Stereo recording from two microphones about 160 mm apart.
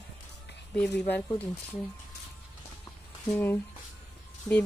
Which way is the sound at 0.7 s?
5° left (ahead or behind).